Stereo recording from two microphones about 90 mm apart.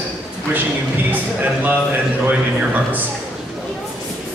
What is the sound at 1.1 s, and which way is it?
A man's voice, 20° right (ahead or behind).